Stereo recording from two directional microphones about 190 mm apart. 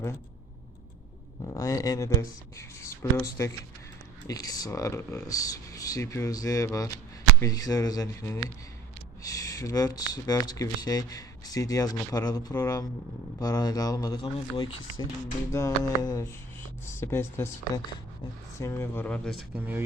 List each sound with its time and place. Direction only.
1.5 s speech: 15° left (ahead or behind)
15.5 s speech: 15° left (ahead or behind)
18.6 s speech: 15° left (ahead or behind)
19.5 s speech: 10° right (ahead or behind)